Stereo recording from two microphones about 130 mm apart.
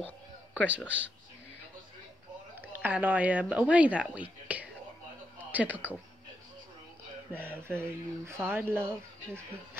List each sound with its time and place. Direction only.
0.7 s speech: 10° right (ahead or behind)
2.6 s speech: 15° right (ahead or behind)
7.3 s speech: 15° right (ahead or behind)